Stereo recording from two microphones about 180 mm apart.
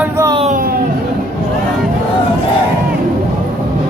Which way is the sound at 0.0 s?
15° right (ahead or behind).